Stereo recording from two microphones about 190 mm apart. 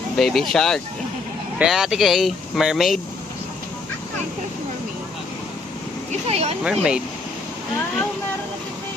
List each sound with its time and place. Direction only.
0.2 s speech: centre (ahead or behind)
6.1 s a sound: 35° right (ahead or behind)
6.6 s speech: 5° right (ahead or behind)